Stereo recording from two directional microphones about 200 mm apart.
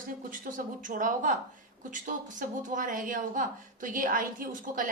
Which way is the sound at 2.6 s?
40° right (ahead or behind).